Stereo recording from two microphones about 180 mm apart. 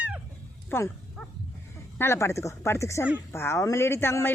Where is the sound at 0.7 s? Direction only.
10° left (ahead or behind).